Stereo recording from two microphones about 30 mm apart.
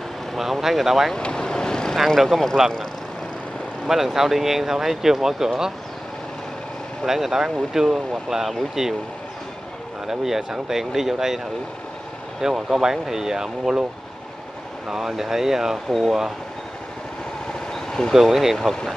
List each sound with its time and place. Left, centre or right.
0.4 s speech: centre
1.1 s vehicle: left
2.1 s speech: centre
3.9 s speech: centre
7.1 s speech: centre
10.0 s speech: centre
14.9 s speech: centre
17.7 s vehicle: left
18.2 s speech: centre